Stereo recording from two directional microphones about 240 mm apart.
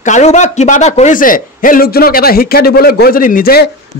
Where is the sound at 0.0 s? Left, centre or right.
Left.